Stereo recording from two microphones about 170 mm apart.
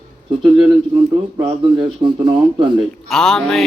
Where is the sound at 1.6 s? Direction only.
25° right (ahead or behind).